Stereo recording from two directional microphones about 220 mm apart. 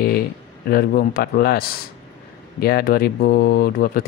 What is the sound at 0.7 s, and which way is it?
Speech, 45° left (ahead or behind).